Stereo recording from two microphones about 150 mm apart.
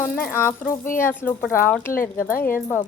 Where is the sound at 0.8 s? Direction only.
65° left (ahead or behind).